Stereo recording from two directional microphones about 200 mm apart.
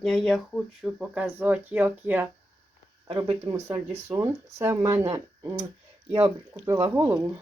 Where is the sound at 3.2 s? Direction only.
20° right (ahead or behind).